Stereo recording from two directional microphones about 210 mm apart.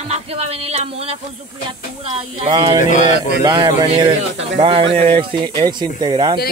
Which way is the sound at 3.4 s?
20° right (ahead or behind).